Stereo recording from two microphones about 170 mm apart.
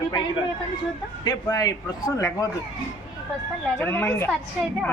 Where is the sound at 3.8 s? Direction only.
15° left (ahead or behind).